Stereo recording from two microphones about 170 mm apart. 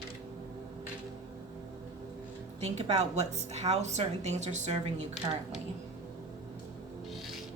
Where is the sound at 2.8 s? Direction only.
40° right (ahead or behind).